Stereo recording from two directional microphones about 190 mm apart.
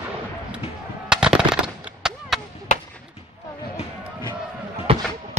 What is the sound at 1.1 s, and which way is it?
Machine gun, 5° right (ahead or behind).